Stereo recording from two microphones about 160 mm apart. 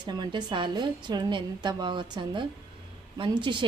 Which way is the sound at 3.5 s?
30° right (ahead or behind).